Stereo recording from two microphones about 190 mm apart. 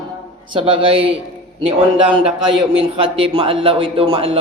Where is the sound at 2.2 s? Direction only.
30° right (ahead or behind).